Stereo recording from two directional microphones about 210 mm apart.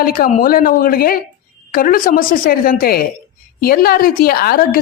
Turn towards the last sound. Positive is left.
turn(degrees=45)  # may be behind; listen again after turning